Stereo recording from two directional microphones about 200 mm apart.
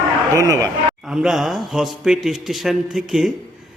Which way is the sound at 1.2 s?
Centre (ahead or behind).